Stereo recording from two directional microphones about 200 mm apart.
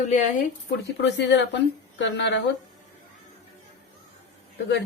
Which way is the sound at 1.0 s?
60° left (ahead or behind).